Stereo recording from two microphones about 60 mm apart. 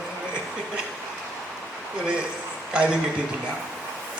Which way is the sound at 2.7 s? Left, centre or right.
Centre.